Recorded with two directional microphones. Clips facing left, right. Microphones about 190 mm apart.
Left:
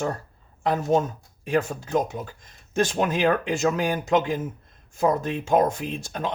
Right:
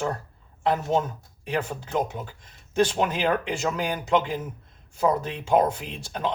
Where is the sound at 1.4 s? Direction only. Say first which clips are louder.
Left 4 dB; 45° left (ahead or behind).